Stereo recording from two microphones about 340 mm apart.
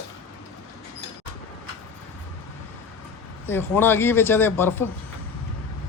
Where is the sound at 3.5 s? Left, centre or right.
Centre.